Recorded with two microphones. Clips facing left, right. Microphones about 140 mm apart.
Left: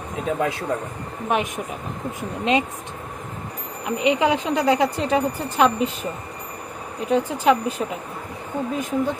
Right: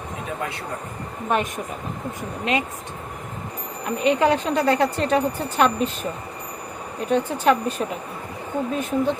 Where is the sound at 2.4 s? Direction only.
25° left (ahead or behind).